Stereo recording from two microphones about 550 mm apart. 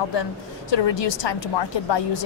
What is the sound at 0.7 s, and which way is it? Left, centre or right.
A woman's voice, left.